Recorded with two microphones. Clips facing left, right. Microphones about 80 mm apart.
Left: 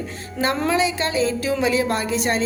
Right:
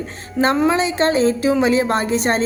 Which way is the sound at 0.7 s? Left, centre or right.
Right.